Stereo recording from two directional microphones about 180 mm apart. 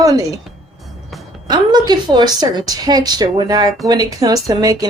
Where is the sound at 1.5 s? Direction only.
25° right (ahead or behind).